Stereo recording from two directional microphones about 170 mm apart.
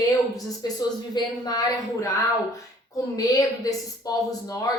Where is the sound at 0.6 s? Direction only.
25° left (ahead or behind).